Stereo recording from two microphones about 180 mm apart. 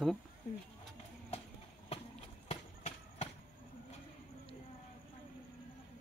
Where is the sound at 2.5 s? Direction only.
35° left (ahead or behind).